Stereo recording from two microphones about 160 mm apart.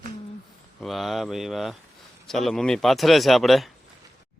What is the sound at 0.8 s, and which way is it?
A man's voice, centre (ahead or behind).